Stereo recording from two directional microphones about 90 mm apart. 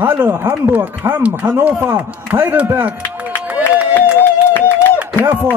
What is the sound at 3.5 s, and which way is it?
Run, 15° right (ahead or behind).